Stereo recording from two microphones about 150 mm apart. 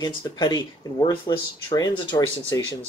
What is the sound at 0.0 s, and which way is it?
Speech, 30° left (ahead or behind).